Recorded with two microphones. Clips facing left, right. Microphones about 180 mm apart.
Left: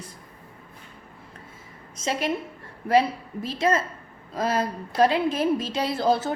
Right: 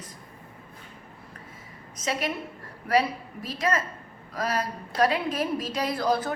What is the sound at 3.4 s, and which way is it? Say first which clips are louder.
A woman's voice: left 4 dB; 25° left (ahead or behind).